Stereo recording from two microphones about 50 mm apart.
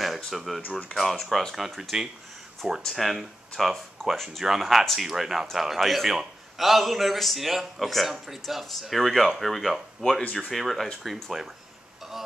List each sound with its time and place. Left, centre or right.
0.0 s a sound: centre
0.6 s speech: left
0.9 s a man's voice: centre
1.8 s a man's voice: centre